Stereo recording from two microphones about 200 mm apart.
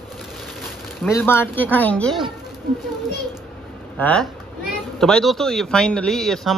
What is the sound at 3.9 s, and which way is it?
A woman's voice, 5° left (ahead or behind).